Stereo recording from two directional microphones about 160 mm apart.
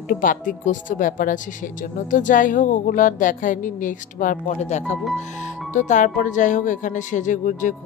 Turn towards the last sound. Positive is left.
turn(degrees=55)  # may be behind; listen again after turning